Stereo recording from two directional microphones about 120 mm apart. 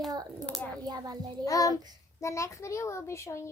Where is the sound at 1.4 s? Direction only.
30° left (ahead or behind).